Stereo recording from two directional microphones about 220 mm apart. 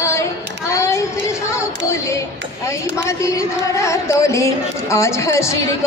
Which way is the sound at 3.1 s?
15° left (ahead or behind).